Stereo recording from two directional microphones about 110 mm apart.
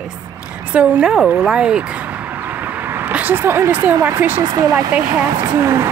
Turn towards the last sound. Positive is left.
turn(degrees=-25)  # may be behind; listen again after turning